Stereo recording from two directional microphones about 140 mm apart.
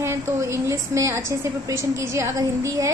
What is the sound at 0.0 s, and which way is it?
Child singing, 20° right (ahead or behind).